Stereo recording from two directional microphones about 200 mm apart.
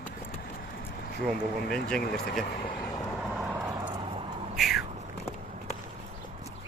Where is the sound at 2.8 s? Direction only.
Centre (ahead or behind); by 4.5 s 30° right (ahead or behind).